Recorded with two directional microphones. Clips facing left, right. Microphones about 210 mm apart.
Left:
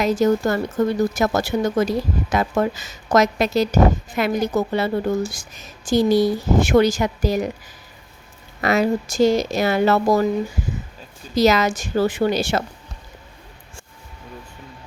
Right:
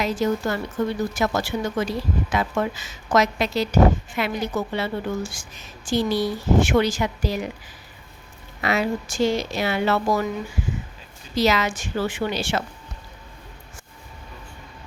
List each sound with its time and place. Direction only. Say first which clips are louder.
0.0 s a woman's voice: left 5 dB; 45° left (ahead or behind)
8.6 s speech: left 5 dB; 45° left (ahead or behind)
11.3 s a woman's voice: left 4 dB; 45° left (ahead or behind)